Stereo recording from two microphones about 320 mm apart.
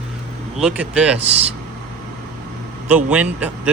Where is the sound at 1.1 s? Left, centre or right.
Centre.